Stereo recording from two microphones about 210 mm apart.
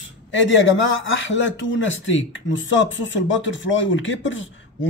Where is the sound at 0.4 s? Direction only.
60° left (ahead or behind).